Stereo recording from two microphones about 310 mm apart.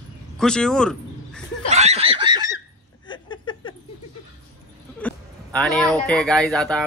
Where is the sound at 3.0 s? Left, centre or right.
Centre.